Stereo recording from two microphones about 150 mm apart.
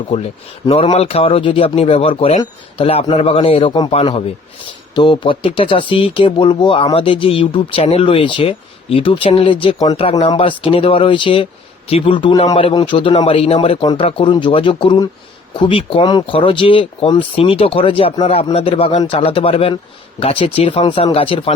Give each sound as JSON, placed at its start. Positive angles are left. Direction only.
{"t": 0.1, "sound": "speech", "side_deg": 40}
{"t": 9.7, "sound": "speech", "side_deg": 25}
{"t": 10.0, "sound": "speech", "side_deg": 40}